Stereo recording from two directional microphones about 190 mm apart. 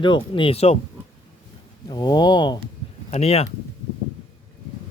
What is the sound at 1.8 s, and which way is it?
Speech, 20° left (ahead or behind).